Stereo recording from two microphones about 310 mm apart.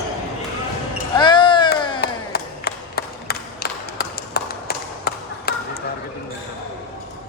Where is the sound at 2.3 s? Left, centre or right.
Left.